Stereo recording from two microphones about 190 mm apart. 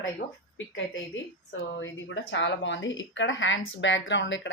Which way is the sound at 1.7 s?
75° left (ahead or behind).